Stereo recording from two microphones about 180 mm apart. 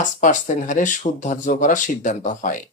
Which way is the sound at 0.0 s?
45° left (ahead or behind).